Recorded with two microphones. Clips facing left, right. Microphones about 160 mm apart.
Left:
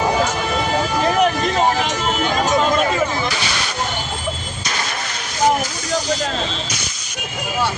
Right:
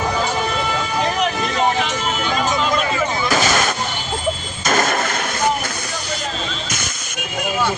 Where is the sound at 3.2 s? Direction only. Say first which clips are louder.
Right 6 dB; 45° right (ahead or behind).